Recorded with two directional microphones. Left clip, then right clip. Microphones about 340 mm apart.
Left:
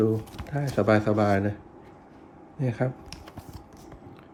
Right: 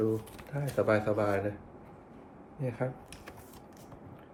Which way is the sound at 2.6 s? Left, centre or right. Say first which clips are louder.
Left 6 dB; left.